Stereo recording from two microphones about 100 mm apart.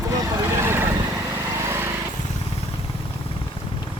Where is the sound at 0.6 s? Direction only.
25° right (ahead or behind).